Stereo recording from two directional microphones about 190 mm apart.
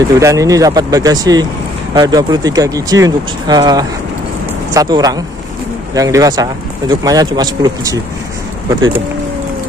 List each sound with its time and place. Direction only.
0.1 s speech: 15° right (ahead or behind)